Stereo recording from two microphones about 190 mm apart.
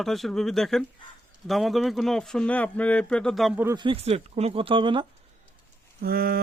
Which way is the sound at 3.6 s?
25° right (ahead or behind).